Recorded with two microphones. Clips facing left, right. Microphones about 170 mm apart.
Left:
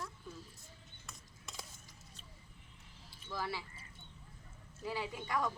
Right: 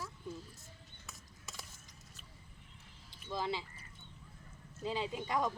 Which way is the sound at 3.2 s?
20° right (ahead or behind).